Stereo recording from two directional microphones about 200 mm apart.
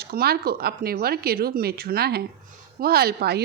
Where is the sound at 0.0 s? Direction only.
50° right (ahead or behind).